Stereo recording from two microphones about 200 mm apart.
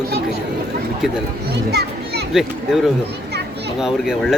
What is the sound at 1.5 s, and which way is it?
Children playing, 55° right (ahead or behind).